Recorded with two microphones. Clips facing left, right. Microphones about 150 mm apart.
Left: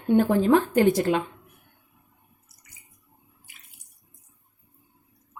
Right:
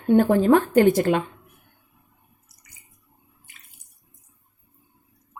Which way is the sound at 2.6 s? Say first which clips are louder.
Even; centre (ahead or behind).